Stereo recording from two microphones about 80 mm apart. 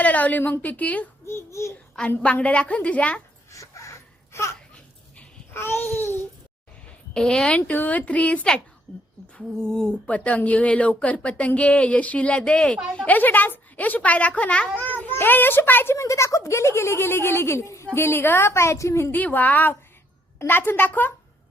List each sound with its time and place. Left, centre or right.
0.0 s a woman's voice: centre
1.3 s speech: left
2.0 s speech: centre
3.5 s a sound: left
5.5 s babbling: left
7.1 s a woman's voice: centre
13.0 s a woman's voice: left
16.0 s speech: left
19.1 s a woman's voice: left